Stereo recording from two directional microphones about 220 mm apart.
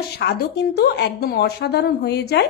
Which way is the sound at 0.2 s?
50° left (ahead or behind).